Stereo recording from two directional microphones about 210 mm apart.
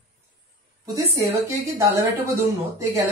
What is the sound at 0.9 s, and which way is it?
A woman's voice, 15° right (ahead or behind).